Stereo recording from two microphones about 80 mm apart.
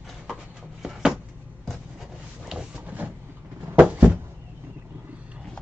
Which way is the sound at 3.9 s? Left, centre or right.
Centre.